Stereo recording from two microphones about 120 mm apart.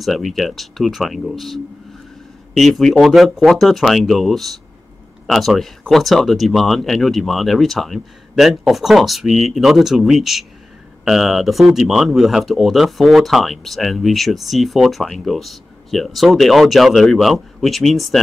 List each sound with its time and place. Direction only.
0.0 s speech: centre (ahead or behind)